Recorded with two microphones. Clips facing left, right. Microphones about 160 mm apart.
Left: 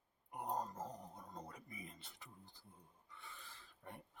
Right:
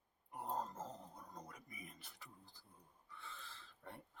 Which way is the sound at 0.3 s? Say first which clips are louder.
Left 1 dB; 15° left (ahead or behind).